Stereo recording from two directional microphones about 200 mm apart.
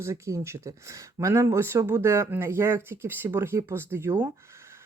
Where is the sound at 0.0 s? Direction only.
15° right (ahead or behind).